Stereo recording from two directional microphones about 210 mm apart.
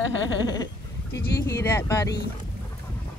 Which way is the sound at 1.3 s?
15° left (ahead or behind).